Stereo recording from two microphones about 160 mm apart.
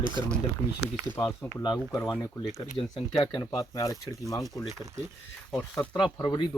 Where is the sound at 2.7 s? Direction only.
30° left (ahead or behind).